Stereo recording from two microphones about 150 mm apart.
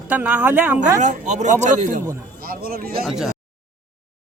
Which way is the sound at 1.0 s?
55° right (ahead or behind).